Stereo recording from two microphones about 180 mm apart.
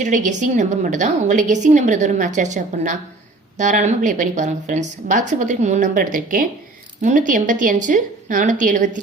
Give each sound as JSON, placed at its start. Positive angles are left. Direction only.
{"t": 0.0, "sound": "a woman's voice", "side_deg": -40}